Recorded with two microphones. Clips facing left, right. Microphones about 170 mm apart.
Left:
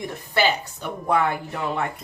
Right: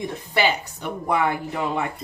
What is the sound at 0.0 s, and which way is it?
Speech, 15° right (ahead or behind).